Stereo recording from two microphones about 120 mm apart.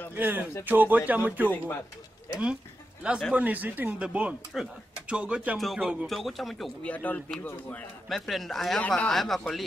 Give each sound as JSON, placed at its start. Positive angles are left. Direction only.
{"t": 0.1, "sound": "speech", "side_deg": -15}
{"t": 1.5, "sound": "speech", "side_deg": 20}
{"t": 3.0, "sound": "a man's voice", "side_deg": -10}
{"t": 6.9, "sound": "speech", "side_deg": 10}
{"t": 8.1, "sound": "speech", "side_deg": 0}